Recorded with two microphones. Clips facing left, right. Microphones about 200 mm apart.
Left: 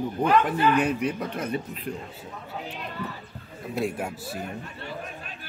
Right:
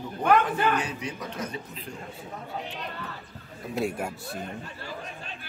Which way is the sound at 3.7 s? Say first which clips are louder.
Left 1 dB; centre (ahead or behind).